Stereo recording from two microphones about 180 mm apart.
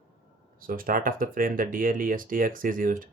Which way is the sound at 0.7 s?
50° right (ahead or behind).